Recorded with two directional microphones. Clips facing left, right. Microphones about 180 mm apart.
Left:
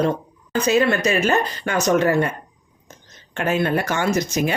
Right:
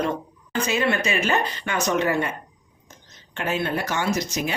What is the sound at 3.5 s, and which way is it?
Speech, 55° left (ahead or behind).